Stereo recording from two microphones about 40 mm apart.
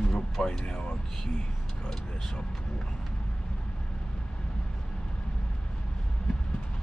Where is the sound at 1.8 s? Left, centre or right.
Left.